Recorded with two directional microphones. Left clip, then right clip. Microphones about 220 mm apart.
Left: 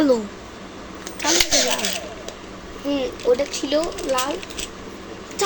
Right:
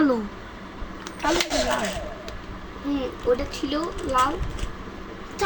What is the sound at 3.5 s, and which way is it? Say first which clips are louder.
Speech: left 6 dB; 25° right (ahead or behind).